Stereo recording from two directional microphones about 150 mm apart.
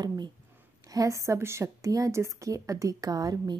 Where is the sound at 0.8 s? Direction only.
20° right (ahead or behind).